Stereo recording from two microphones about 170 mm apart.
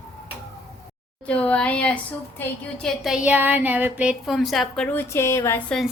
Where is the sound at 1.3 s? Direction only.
5° left (ahead or behind).